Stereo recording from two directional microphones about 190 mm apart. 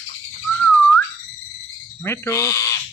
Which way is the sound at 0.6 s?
5° left (ahead or behind).